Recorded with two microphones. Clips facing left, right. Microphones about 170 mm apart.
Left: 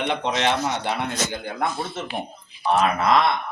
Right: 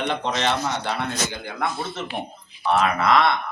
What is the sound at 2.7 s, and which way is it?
Speech, 20° left (ahead or behind).